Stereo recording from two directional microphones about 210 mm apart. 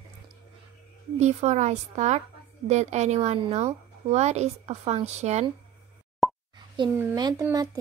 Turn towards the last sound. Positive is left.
turn(degrees=-15)  # may be behind; listen again after turning